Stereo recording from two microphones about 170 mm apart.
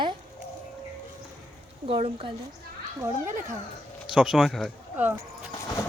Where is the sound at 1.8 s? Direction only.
35° right (ahead or behind).